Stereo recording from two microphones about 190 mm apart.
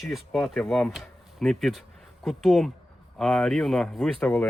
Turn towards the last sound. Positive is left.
turn(degrees=5)  # may be behind; listen again after turning